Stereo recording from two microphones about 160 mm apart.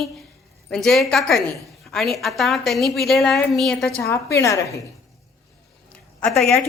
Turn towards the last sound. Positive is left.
turn(degrees=0)  # may be behind; listen again after turning